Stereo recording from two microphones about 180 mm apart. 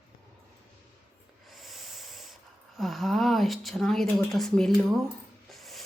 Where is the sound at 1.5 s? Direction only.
Centre (ahead or behind).